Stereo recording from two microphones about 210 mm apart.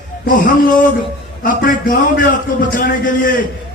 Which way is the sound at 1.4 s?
40° left (ahead or behind).